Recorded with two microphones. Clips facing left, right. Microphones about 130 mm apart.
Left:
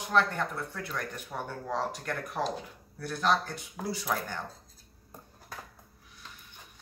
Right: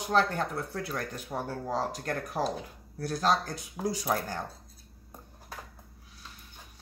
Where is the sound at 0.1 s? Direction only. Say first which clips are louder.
Right 1 dB; 35° right (ahead or behind).